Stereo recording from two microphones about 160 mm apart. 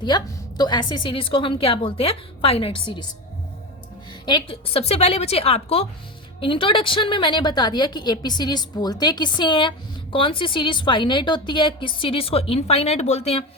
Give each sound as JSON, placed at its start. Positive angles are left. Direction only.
{"t": 0.0, "sound": "a woman's voice", "side_deg": 25}
{"t": 4.3, "sound": "a woman's voice", "side_deg": 30}